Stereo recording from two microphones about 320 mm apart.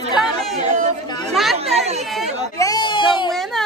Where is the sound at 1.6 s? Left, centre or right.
Centre.